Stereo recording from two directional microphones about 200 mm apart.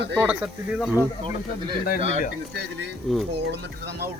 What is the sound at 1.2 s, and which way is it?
Speech, 20° right (ahead or behind).